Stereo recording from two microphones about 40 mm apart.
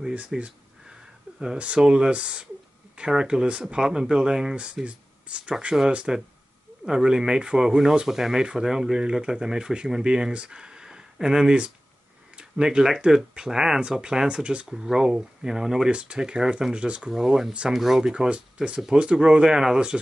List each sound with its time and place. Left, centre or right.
0.3 s speech: centre
1.3 s a sound: right
1.8 s speech: right
4.8 s speech: right
12.4 s a sound: right
13.1 s speech: right
14.7 s speech: centre
15.9 s speech: right
17.1 s speech: centre
17.7 s speech: centre
18.1 s speech: right